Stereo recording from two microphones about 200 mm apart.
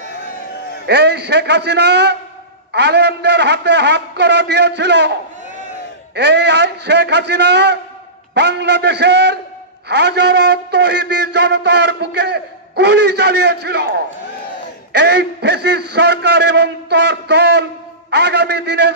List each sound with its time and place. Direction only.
0.8 s a man's voice: 55° right (ahead or behind)
6.1 s a man's voice: 60° right (ahead or behind)